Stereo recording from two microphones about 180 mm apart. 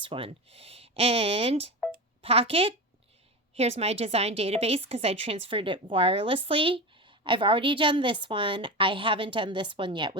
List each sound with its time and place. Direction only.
0.0 s a woman's voice: 30° right (ahead or behind)